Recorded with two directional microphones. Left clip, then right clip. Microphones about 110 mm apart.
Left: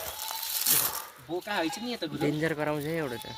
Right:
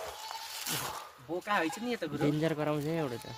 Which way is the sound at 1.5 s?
35° right (ahead or behind).